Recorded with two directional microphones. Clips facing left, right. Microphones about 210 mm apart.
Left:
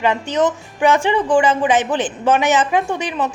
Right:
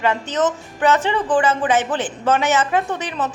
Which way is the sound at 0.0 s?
15° left (ahead or behind).